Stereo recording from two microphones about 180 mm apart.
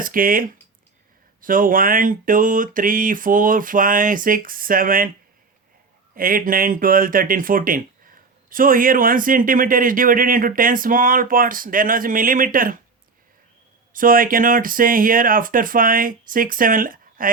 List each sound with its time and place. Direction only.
0.0 s speech: 50° right (ahead or behind)
6.1 s speech: 50° right (ahead or behind)
13.9 s speech: 50° right (ahead or behind)